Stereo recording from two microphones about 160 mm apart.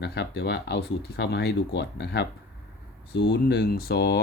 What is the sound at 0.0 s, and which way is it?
Speech, 90° left.